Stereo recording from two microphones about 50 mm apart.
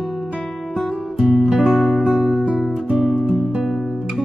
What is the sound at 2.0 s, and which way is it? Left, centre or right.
Music, centre.